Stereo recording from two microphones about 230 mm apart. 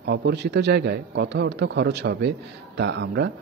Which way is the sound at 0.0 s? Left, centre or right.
Right.